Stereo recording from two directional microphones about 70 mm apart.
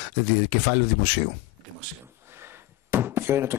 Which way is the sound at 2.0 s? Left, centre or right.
Right.